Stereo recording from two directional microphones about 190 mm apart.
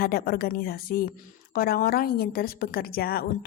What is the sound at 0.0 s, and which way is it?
A woman's voice, 50° left (ahead or behind).